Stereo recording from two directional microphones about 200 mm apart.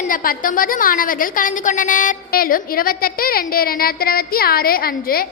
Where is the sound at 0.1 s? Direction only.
45° left (ahead or behind).